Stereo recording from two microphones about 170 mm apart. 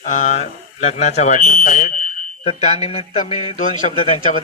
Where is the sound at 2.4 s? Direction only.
35° left (ahead or behind).